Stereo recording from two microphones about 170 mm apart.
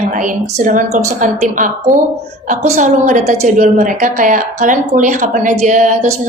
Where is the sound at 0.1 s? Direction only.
50° right (ahead or behind).